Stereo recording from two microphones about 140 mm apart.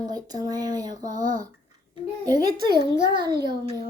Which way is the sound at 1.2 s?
75° right (ahead or behind).